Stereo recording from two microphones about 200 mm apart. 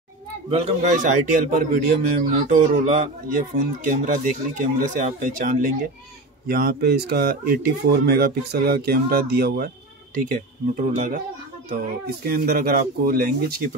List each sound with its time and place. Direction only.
0.5 s a man's voice: 30° right (ahead or behind); by 9.7 s 50° right (ahead or behind)
10.1 s speech: 40° right (ahead or behind)
12.3 s speech: 50° right (ahead or behind)